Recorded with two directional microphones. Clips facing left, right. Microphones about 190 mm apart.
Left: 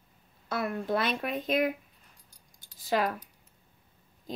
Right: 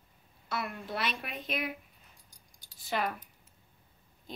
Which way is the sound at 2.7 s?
90° left.